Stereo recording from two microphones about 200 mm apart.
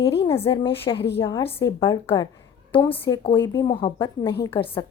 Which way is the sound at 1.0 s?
55° left (ahead or behind).